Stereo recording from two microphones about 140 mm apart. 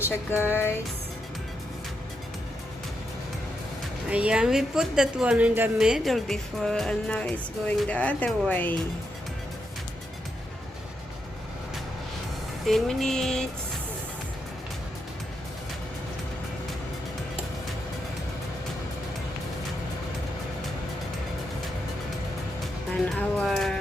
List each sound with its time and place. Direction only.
0.3 s music: 15° left (ahead or behind)
4.1 s speech: 10° right (ahead or behind); by 8.7 s 15° left (ahead or behind)
12.6 s speech: centre (ahead or behind)
23.1 s speech: centre (ahead or behind)